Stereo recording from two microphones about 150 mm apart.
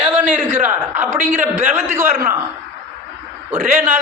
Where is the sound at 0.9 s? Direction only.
55° right (ahead or behind).